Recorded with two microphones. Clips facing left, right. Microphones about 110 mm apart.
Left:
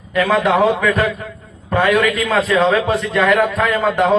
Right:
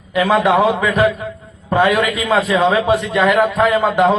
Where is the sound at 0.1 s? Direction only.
15° right (ahead or behind).